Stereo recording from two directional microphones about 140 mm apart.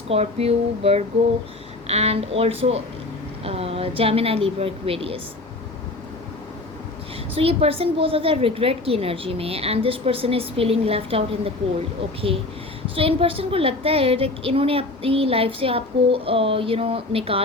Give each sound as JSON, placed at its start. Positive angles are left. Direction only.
{"t": 0.1, "sound": "a woman's voice", "side_deg": -45}
{"t": 7.3, "sound": "a woman's voice", "side_deg": -40}
{"t": 13.0, "sound": "a woman's voice", "side_deg": -40}